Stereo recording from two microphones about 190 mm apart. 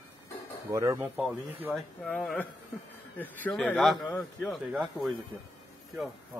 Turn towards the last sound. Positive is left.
turn(degrees=0)  # may be behind; listen again after turning